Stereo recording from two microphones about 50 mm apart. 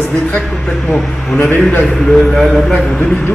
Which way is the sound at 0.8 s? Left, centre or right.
Centre.